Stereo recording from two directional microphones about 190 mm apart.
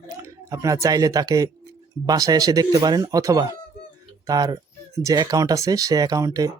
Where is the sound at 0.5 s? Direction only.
15° right (ahead or behind).